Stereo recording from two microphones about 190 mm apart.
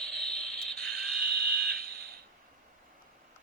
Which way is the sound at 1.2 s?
60° right (ahead or behind).